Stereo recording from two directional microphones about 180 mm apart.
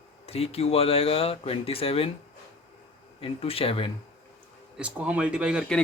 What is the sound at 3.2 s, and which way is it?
Speech, 30° left (ahead or behind).